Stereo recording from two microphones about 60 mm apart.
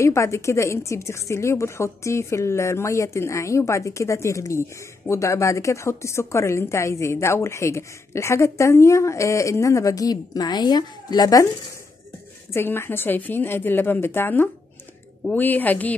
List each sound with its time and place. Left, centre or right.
0.0 s speech: left
12.5 s a woman's voice: left